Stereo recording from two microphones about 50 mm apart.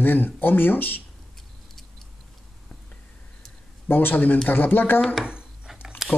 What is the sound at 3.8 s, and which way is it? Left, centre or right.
Speech, left.